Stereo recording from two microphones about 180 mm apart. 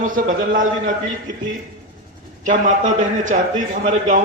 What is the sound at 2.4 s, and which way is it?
A man's voice, 45° right (ahead or behind).